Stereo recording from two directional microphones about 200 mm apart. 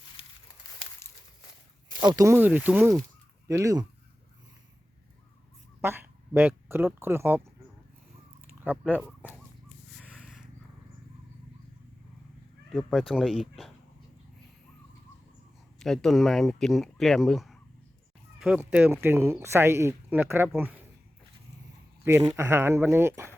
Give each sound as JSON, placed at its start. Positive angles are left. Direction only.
{"t": 0.2, "sound": "a sound", "side_deg": 25}
{"t": 1.0, "sound": "a sound", "side_deg": 15}
{"t": 2.0, "sound": "speech", "side_deg": -20}
{"t": 5.8, "sound": "a sound", "side_deg": -10}
{"t": 6.7, "sound": "speech", "side_deg": -10}
{"t": 8.6, "sound": "speech", "side_deg": -10}
{"t": 12.7, "sound": "speech", "side_deg": 0}
{"t": 15.8, "sound": "speech", "side_deg": 0}
{"t": 22.3, "sound": "speech", "side_deg": -15}